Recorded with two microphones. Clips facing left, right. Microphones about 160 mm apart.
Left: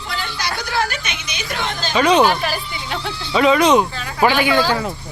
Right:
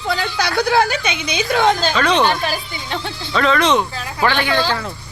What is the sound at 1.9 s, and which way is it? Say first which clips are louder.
Speech: left 2 dB; 10° left (ahead or behind).